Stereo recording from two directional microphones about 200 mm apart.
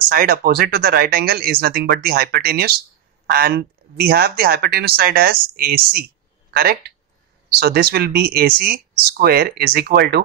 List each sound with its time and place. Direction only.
0.1 s speech: 45° right (ahead or behind)